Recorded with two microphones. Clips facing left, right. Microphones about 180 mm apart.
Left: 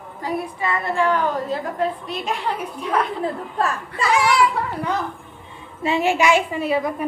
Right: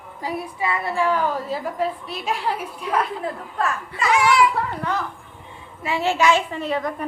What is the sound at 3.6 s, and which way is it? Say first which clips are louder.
Speech: left 1 dB; 35° left (ahead or behind).